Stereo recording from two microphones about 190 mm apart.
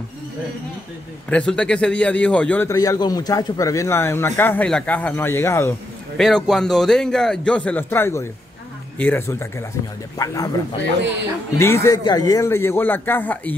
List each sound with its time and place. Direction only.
1.3 s speech: 5° left (ahead or behind)
6.1 s a man's voice: centre (ahead or behind); by 10.5 s 20° left (ahead or behind)
11.5 s speech: 15° left (ahead or behind)